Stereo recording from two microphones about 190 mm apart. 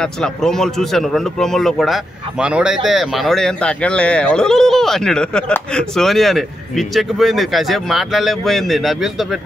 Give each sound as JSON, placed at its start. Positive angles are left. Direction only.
{"t": 0.0, "sound": "speech", "side_deg": 5}